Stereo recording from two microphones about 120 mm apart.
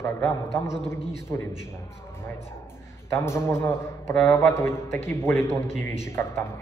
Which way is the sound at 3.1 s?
20° left (ahead or behind).